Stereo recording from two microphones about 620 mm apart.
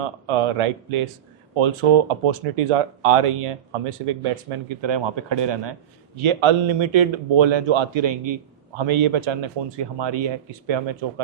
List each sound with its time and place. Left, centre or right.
0.0 s speech: right